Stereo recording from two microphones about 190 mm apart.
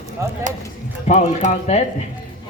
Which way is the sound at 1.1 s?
35° left (ahead or behind).